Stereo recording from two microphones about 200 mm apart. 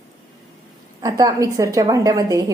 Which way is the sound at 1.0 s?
20° right (ahead or behind).